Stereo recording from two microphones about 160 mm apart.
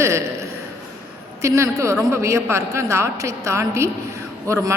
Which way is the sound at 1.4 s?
20° right (ahead or behind).